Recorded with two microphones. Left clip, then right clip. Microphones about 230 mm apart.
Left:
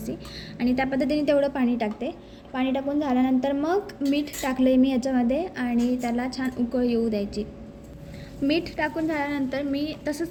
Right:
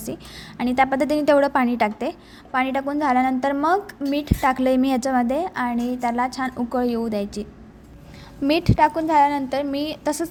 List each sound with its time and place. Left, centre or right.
0.0 s a woman's voice: right
8.4 s a woman's voice: right